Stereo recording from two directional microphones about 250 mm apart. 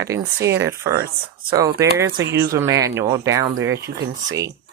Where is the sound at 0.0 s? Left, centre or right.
Centre.